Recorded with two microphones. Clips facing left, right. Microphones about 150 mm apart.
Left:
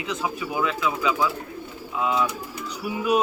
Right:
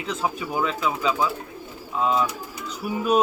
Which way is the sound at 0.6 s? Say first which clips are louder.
Even; 35° right (ahead or behind).